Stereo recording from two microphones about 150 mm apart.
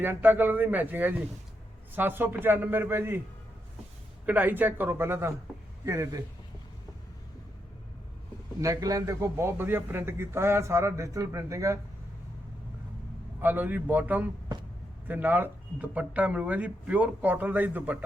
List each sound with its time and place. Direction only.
0.0 s speech: 10° right (ahead or behind)
4.3 s a man's voice: 10° right (ahead or behind)
8.6 s a man's voice: 25° right (ahead or behind)
13.4 s speech: 10° right (ahead or behind)